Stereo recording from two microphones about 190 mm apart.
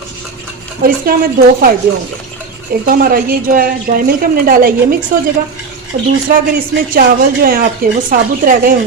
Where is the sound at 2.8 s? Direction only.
50° right (ahead or behind).